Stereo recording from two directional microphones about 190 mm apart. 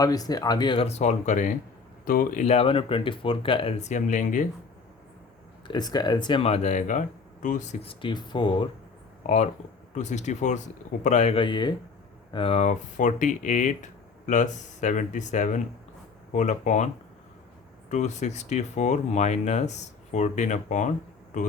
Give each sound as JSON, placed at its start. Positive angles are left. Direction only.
{"t": 0.0, "sound": "speech", "side_deg": 20}
{"t": 5.6, "sound": "speech", "side_deg": 20}
{"t": 9.2, "sound": "speech", "side_deg": 35}